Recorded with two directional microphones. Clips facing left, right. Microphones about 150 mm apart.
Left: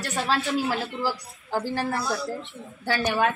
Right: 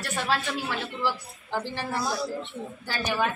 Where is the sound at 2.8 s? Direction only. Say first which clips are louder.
Left 5 dB; 60° left (ahead or behind).